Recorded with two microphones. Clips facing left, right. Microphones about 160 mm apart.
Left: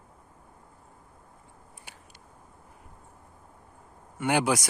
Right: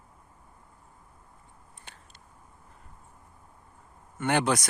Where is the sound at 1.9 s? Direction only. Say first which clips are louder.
Even; 10° left (ahead or behind).